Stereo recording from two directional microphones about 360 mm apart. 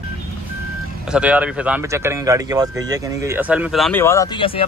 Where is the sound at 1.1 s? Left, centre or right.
Centre.